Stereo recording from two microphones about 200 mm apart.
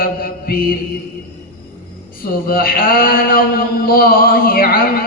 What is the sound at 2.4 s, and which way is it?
Mantra, 45° left (ahead or behind).